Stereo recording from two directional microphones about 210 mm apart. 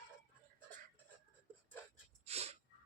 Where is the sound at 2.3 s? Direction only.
30° right (ahead or behind).